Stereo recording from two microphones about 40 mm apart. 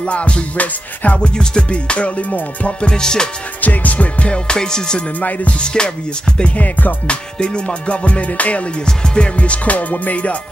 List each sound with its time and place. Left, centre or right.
0.0 s music: left
1.2 s music: left
2.8 s music: centre
3.6 s music: left
6.5 s music: left
7.1 s music: left
8.8 s music: left